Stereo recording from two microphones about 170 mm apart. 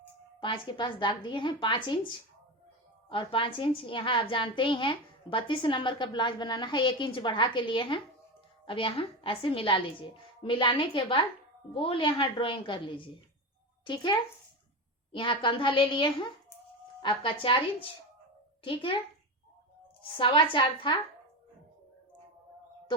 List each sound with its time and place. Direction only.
0.4 s a woman's voice: 30° left (ahead or behind)
20.0 s a woman's voice: 30° left (ahead or behind)